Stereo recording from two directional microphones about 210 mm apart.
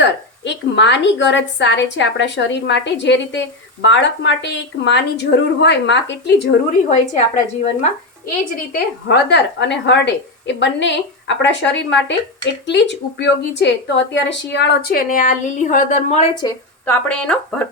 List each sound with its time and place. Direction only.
0.0 s a woman's voice: 55° left (ahead or behind)
6.9 s a woman's voice: 35° left (ahead or behind)
8.5 s a woman's voice: 50° left (ahead or behind)
16.4 s a woman's voice: 20° left (ahead or behind)
16.8 s speech: 5° left (ahead or behind)